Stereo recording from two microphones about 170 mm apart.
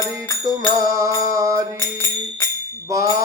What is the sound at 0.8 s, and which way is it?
Music, 20° right (ahead or behind).